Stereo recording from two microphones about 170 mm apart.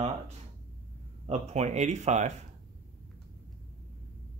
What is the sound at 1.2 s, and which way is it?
Speech, 40° right (ahead or behind).